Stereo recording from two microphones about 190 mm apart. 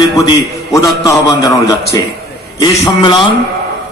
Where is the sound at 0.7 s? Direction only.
20° left (ahead or behind).